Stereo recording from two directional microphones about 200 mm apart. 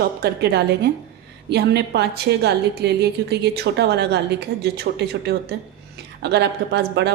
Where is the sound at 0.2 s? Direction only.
55° right (ahead or behind).